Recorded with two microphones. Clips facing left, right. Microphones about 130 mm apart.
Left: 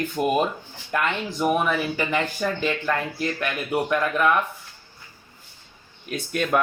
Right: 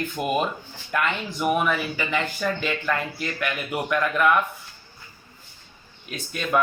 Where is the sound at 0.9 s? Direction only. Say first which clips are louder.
Left 1 dB; 35° left (ahead or behind).